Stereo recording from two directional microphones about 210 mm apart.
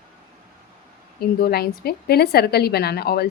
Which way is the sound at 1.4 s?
45° left (ahead or behind).